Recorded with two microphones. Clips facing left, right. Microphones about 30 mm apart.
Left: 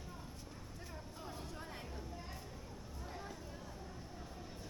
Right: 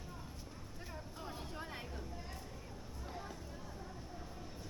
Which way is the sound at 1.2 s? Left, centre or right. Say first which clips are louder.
Right 2 dB; right.